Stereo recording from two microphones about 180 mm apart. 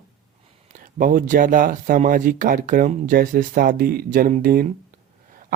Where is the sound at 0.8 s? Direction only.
50° right (ahead or behind).